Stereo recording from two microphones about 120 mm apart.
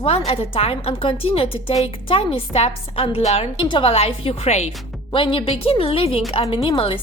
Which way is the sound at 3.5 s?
45° left (ahead or behind).